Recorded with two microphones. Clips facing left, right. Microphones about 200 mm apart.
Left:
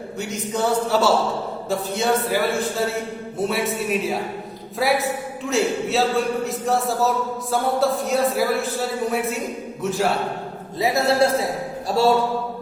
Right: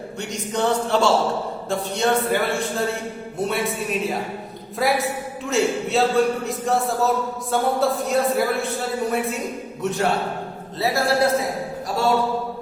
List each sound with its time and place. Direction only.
0.2 s a man's voice: 5° left (ahead or behind)
10.8 s a man's voice: 20° left (ahead or behind)